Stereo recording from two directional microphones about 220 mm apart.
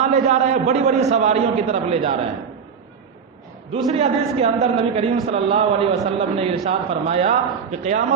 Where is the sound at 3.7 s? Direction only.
30° right (ahead or behind).